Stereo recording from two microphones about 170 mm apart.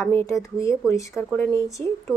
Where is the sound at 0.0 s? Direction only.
15° left (ahead or behind).